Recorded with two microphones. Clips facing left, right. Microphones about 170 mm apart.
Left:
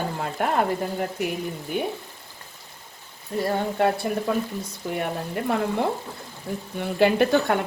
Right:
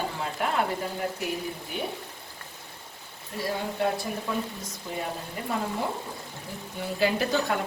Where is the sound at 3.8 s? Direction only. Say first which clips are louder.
Left 5 dB; 60° left (ahead or behind).